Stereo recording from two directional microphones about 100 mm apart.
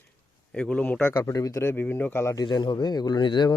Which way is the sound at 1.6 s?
20° left (ahead or behind).